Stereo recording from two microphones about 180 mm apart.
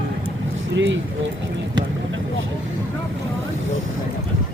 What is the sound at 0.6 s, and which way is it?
Vehicle, 90° right.